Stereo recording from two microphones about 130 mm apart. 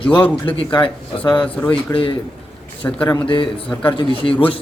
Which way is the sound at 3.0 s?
40° left (ahead or behind).